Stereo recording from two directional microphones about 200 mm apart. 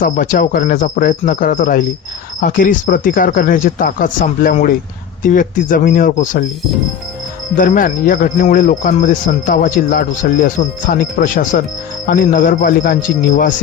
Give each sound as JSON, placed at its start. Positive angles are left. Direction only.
{"t": 0.0, "sound": "speech", "side_deg": 45}
{"t": 7.5, "sound": "speech", "side_deg": 45}